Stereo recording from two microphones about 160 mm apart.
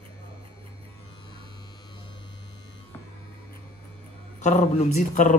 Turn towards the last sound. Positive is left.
turn(degrees=50)  # may be behind; listen again after turning